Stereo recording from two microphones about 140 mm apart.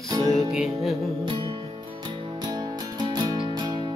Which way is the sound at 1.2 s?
35° right (ahead or behind).